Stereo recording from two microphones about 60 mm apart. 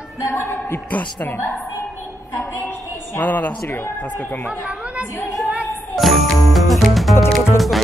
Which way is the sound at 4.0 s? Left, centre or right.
Left.